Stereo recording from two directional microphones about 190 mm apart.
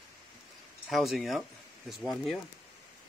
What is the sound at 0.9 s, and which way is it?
Speech, centre (ahead or behind).